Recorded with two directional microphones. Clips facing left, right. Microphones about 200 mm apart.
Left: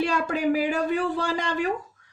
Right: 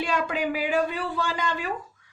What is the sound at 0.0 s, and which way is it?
Speech, 40° left (ahead or behind).